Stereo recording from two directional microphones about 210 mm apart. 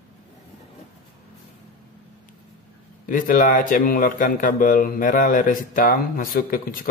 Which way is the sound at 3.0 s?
40° left (ahead or behind).